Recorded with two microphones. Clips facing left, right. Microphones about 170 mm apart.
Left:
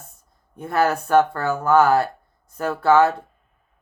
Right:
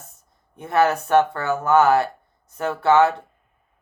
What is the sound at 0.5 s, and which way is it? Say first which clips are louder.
Speech: right 1 dB; 20° right (ahead or behind).